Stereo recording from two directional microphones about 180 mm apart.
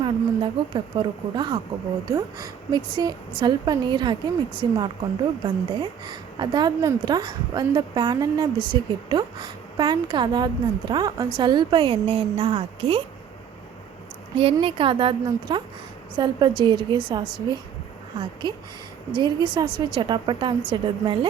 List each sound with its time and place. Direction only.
0.0 s a woman's voice: 25° right (ahead or behind)
14.3 s a woman's voice: 30° right (ahead or behind)